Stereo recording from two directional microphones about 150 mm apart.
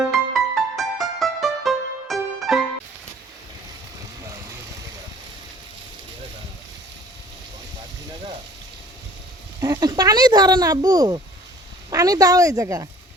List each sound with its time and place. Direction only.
0.1 s music: centre (ahead or behind)
9.6 s a sound: 25° right (ahead or behind)
11.9 s a woman's voice: 25° right (ahead or behind)